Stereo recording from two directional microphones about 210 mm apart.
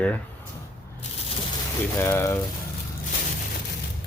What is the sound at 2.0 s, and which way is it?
Speech, 10° left (ahead or behind).